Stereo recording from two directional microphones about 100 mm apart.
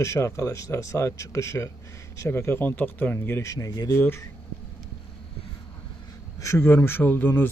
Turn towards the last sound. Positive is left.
turn(degrees=20)  # may be behind; listen again after turning